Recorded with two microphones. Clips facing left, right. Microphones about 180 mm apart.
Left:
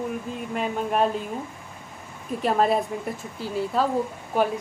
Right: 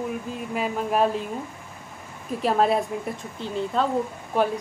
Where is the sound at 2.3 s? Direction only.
Centre (ahead or behind).